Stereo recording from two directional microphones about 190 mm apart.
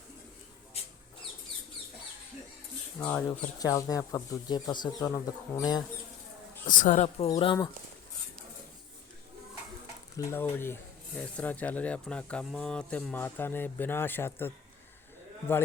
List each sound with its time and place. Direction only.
3.0 s speech: 5° left (ahead or behind)
3.6 s speech: 20° left (ahead or behind)
6.7 s speech: 45° left (ahead or behind)
7.3 s speech: 25° left (ahead or behind)
10.2 s speech: 15° left (ahead or behind)